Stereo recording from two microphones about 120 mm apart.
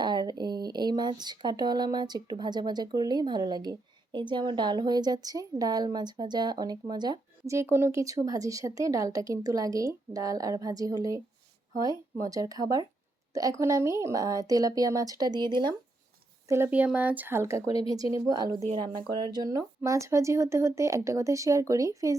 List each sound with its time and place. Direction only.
0.0 s a woman's voice: 35° right (ahead or behind)
7.5 s a woman's voice: 20° right (ahead or behind)
12.3 s a woman's voice: 30° right (ahead or behind)
16.5 s a woman's voice: 20° right (ahead or behind)